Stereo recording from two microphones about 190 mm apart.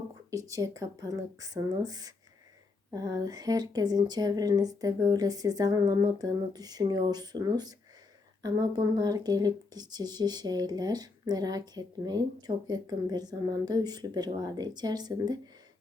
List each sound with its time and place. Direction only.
0.3 s speech: 15° right (ahead or behind)